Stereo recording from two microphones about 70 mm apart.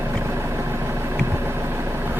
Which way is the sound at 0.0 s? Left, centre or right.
Right.